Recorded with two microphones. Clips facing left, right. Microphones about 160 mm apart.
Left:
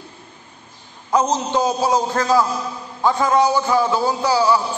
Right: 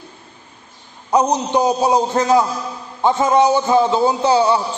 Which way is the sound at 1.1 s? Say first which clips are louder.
Right 2 dB; 15° right (ahead or behind).